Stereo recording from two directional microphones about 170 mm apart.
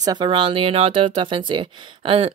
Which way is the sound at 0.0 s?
25° right (ahead or behind).